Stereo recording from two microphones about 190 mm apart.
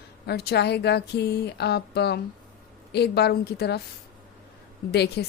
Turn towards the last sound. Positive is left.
turn(degrees=60)  # may be behind; listen again after turning